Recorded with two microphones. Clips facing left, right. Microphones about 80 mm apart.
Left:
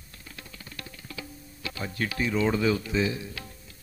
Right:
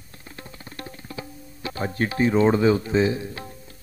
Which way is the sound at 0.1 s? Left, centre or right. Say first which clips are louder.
Right 5 dB; right.